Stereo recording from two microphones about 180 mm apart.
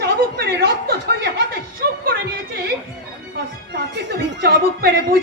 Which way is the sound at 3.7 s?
60° right (ahead or behind).